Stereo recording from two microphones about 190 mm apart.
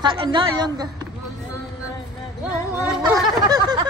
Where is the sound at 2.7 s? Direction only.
10° right (ahead or behind).